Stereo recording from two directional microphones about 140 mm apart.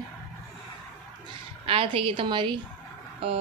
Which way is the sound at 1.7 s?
40° right (ahead or behind).